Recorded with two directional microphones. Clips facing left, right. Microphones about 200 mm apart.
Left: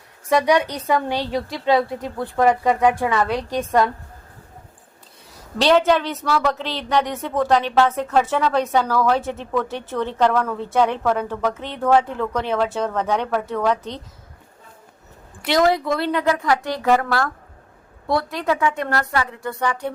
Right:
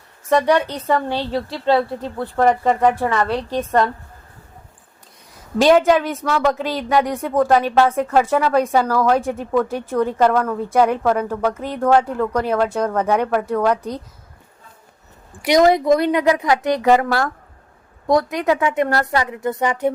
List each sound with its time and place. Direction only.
0.3 s a woman's voice: 10° left (ahead or behind)
2.1 s speech: centre (ahead or behind)
3.2 s a woman's voice: 15° left (ahead or behind)
5.6 s speech: 10° right (ahead or behind)
15.4 s speech: 20° right (ahead or behind)